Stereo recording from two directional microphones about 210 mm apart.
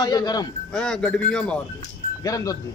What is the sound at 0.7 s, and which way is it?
Speech, 5° left (ahead or behind).